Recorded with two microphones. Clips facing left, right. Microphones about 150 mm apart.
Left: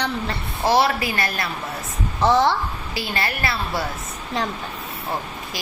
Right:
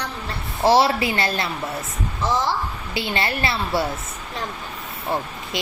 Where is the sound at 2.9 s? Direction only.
25° right (ahead or behind).